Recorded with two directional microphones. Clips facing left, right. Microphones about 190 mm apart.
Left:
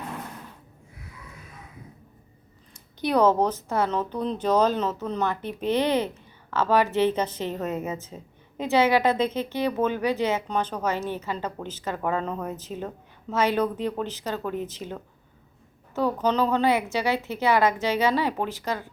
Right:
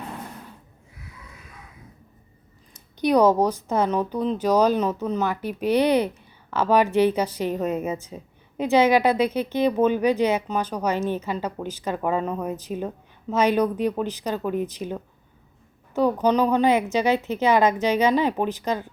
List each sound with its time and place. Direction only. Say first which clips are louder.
2.7 s a woman's voice: right 4 dB; 15° right (ahead or behind)